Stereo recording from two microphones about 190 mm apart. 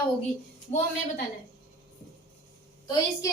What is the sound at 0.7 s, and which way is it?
Speech, 35° left (ahead or behind).